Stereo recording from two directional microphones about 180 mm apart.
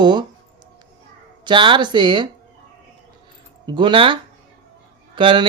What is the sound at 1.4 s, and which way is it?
Speech, 25° right (ahead or behind).